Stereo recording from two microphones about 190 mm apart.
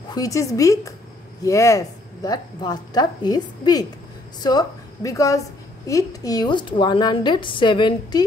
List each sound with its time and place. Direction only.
0.1 s a woman's voice: 20° left (ahead or behind)